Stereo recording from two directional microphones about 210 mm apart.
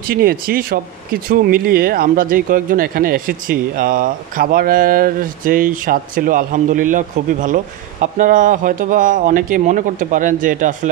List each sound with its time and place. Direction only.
0.0 s speech: 45° right (ahead or behind)